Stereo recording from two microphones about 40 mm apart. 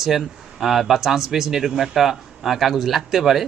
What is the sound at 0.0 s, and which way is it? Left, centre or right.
Speech, centre.